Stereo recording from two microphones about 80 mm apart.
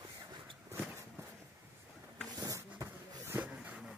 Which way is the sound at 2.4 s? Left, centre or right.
Right.